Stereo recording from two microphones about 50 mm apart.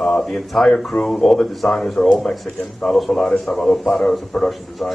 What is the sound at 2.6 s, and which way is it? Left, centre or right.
Speech, centre.